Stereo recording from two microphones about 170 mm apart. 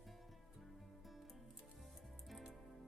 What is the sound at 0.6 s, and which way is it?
Music, centre (ahead or behind).